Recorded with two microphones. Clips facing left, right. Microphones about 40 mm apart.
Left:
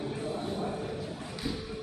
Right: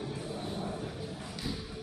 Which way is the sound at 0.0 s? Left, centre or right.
Left.